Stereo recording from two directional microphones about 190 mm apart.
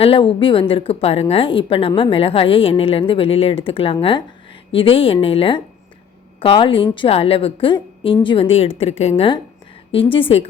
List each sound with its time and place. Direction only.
0.0 s a woman's voice: 30° left (ahead or behind)